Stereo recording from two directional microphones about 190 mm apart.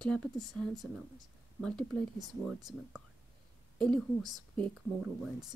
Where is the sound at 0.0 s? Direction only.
5° left (ahead or behind).